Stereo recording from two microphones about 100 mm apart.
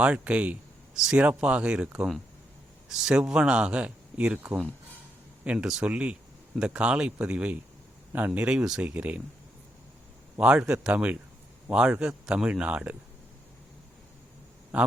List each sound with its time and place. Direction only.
0.0 s speech: 15° right (ahead or behind)
10.4 s speech: 10° right (ahead or behind)